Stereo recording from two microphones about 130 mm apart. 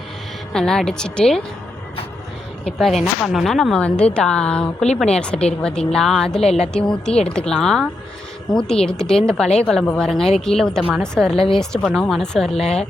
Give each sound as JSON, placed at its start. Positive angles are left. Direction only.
{"t": 0.5, "sound": "speech", "side_deg": 5}
{"t": 2.6, "sound": "speech", "side_deg": 0}
{"t": 11.3, "sound": "speech", "side_deg": 45}
{"t": 11.6, "sound": "speech", "side_deg": 5}